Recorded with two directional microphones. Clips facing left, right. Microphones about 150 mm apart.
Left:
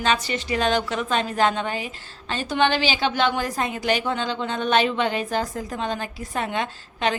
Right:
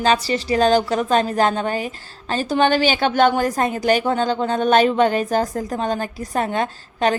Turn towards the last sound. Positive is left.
turn(degrees=-40)  # may be behind; listen again after turning